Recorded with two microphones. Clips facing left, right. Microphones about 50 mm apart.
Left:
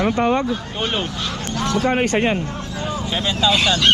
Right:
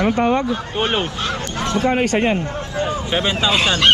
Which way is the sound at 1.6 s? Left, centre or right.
Right.